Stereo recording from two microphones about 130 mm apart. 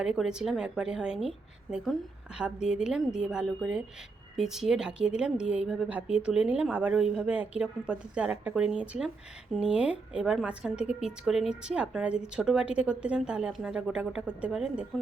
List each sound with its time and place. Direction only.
0.0 s a woman's voice: 5° right (ahead or behind)